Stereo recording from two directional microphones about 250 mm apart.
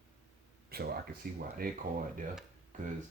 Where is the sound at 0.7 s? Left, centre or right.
Right.